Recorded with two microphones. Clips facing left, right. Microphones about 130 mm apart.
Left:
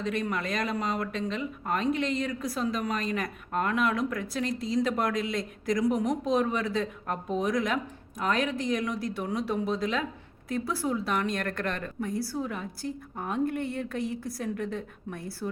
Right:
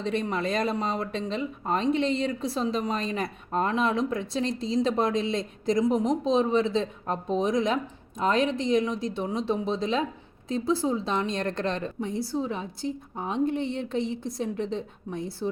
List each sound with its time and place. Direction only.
0.0 s speech: 30° right (ahead or behind)